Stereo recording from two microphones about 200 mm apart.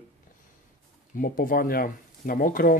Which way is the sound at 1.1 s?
45° left (ahead or behind).